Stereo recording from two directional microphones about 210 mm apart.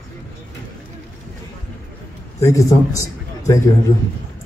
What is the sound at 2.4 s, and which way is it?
A man's voice, 15° left (ahead or behind).